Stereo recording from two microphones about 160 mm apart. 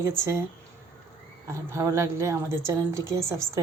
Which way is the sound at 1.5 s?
20° right (ahead or behind).